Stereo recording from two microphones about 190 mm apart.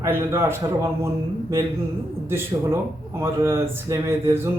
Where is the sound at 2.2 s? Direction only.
15° right (ahead or behind).